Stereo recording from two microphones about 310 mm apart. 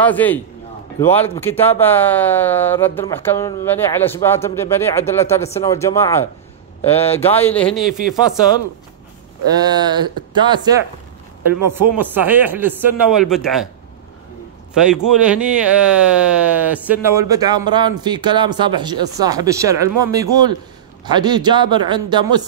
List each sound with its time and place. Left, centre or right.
0.0 s speech: centre
6.8 s speech: centre
7.2 s speech: centre
9.6 s speech: centre
14.7 s a man's voice: centre